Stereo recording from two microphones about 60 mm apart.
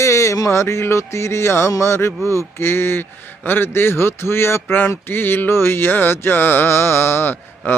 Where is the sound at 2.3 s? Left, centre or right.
Left.